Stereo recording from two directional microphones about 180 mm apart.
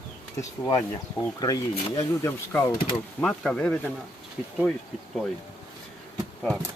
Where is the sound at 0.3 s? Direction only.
15° left (ahead or behind).